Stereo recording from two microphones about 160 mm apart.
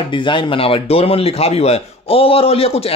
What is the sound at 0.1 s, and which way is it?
Speech, 30° left (ahead or behind).